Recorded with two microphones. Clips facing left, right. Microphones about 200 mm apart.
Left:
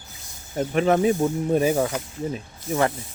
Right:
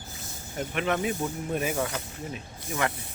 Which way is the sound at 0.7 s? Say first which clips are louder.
Left 9 dB; 35° left (ahead or behind).